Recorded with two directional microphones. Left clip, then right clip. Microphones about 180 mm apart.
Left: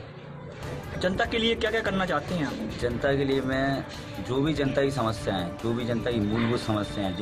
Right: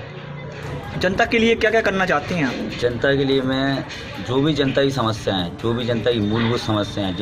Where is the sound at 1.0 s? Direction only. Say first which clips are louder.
Right 8 dB; 35° right (ahead or behind).